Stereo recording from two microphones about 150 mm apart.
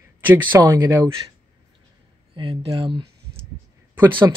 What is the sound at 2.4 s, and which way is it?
Speech, 35° right (ahead or behind).